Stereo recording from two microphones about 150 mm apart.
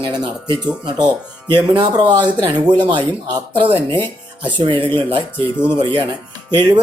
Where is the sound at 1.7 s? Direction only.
30° right (ahead or behind).